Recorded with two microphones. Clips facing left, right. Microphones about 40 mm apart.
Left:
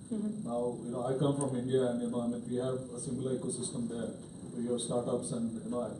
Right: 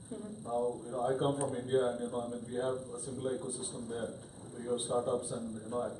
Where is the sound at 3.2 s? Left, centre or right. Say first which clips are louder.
Left 1 dB; centre.